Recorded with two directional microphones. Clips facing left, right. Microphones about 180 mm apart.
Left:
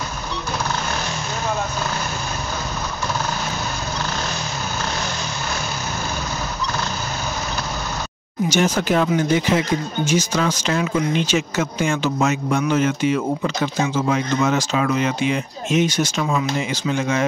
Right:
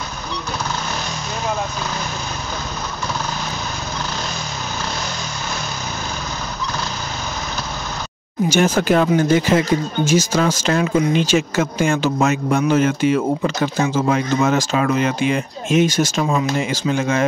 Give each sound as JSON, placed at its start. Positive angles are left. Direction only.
{"t": 8.5, "sound": "speech", "side_deg": -55}
{"t": 16.9, "sound": "speech", "side_deg": -50}